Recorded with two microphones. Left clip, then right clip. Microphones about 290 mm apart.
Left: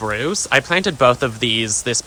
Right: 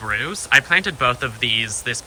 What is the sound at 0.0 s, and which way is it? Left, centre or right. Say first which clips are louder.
Speech: left 3 dB; centre.